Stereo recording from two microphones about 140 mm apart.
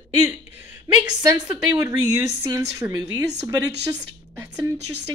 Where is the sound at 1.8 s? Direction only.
20° right (ahead or behind).